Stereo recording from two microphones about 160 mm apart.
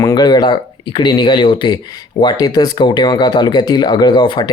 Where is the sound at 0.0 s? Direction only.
25° left (ahead or behind).